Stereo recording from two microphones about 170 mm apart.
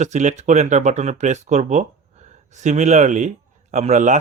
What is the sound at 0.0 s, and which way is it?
Speech, 45° right (ahead or behind).